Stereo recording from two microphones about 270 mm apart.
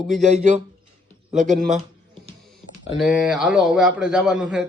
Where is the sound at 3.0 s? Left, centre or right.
Centre.